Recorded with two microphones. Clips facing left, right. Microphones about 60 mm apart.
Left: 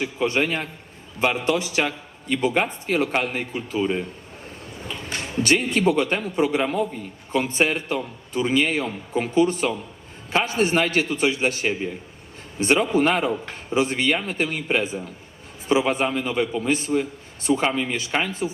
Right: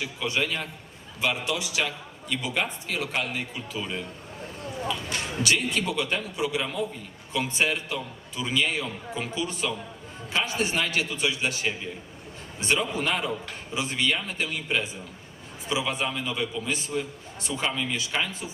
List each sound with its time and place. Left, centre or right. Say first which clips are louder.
0.0 s a man's voice: left 6 dB; left